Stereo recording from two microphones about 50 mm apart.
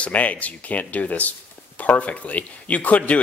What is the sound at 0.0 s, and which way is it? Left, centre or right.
Speech, left.